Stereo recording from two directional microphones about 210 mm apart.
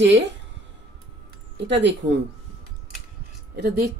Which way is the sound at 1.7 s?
55° right (ahead or behind).